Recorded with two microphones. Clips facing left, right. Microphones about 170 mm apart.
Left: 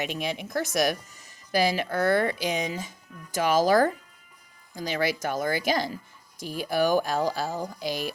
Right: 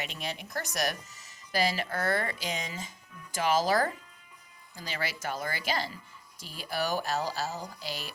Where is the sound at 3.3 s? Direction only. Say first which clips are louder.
Left 5 dB; 50° left (ahead or behind).